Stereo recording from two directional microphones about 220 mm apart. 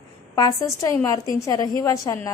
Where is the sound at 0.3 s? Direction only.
15° left (ahead or behind).